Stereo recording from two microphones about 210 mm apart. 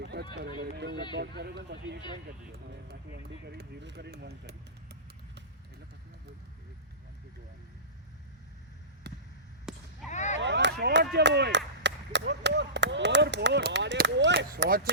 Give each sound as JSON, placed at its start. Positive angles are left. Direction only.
{"t": 0.0, "sound": "speech", "side_deg": -50}
{"t": 3.4, "sound": "speech", "side_deg": -50}
{"t": 9.0, "sound": "basketball bounce", "side_deg": -55}
{"t": 9.7, "sound": "a sound", "side_deg": 0}
{"t": 10.1, "sound": "whip", "side_deg": 35}
{"t": 10.4, "sound": "speech", "side_deg": -55}